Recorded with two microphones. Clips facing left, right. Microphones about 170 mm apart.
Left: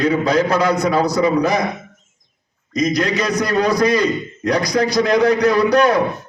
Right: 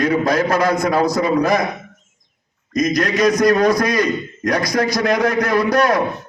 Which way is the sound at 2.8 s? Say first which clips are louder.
Right 2 dB; 50° right (ahead or behind).